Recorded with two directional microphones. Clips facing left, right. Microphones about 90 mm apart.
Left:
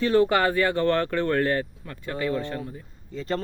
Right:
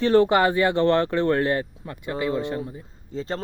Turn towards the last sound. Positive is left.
turn(degrees=-25)  # may be behind; listen again after turning